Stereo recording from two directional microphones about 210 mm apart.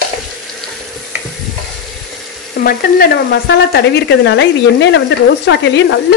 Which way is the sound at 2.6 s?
45° left (ahead or behind).